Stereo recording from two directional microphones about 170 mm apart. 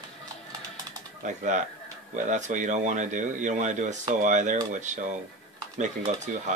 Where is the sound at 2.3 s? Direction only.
45° right (ahead or behind).